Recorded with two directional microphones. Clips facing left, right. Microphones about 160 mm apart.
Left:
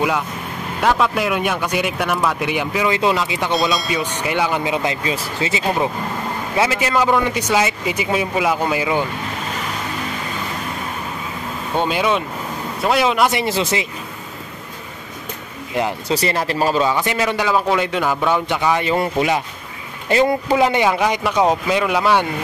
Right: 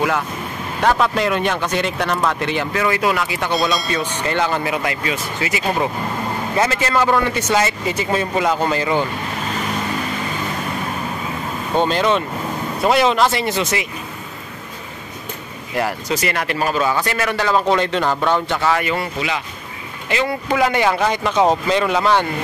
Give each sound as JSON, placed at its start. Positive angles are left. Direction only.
{"t": 0.8, "sound": "speech", "side_deg": 0}
{"t": 3.5, "sound": "speech", "side_deg": 0}
{"t": 3.9, "sound": "speech", "side_deg": 10}
{"t": 4.7, "sound": "speech", "side_deg": 25}
{"t": 6.5, "sound": "speech", "side_deg": 10}
{"t": 11.8, "sound": "speech", "side_deg": 10}
{"t": 13.3, "sound": "speech", "side_deg": 25}
{"t": 15.7, "sound": "speech", "side_deg": 20}
{"t": 16.2, "sound": "speech", "side_deg": 30}
{"t": 17.6, "sound": "speech", "side_deg": 5}
{"t": 18.9, "sound": "speech", "side_deg": 45}
{"t": 20.5, "sound": "speech", "side_deg": 20}